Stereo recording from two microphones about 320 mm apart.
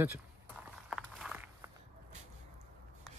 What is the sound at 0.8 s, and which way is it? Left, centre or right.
Walk, centre.